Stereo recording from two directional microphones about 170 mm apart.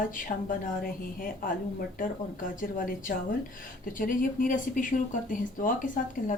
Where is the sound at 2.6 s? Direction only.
55° left (ahead or behind).